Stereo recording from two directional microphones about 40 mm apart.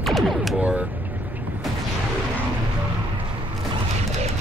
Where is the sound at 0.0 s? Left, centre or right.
Centre.